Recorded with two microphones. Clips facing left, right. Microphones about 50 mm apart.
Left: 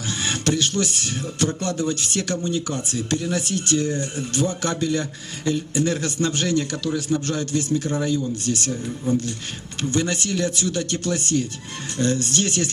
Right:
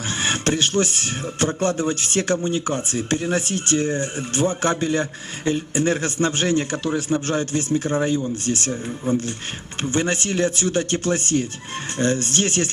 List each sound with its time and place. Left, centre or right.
0.1 s speech: right